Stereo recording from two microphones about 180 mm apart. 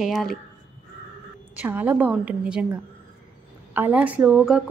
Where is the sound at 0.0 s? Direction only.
Centre (ahead or behind).